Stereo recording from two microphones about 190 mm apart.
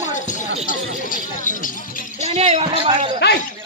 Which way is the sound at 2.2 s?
35° right (ahead or behind).